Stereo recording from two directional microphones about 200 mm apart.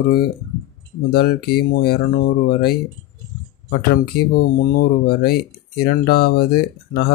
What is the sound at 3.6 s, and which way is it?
Speech, 50° left (ahead or behind).